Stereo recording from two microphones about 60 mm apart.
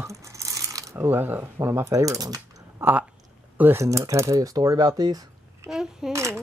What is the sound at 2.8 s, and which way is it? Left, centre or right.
Speech, right.